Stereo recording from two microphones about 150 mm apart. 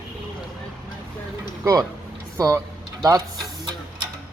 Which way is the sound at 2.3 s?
20° right (ahead or behind).